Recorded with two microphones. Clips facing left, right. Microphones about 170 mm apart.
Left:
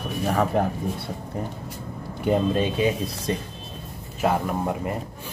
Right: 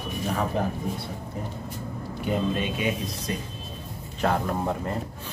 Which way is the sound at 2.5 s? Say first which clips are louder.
Left 5 dB; 30° left (ahead or behind).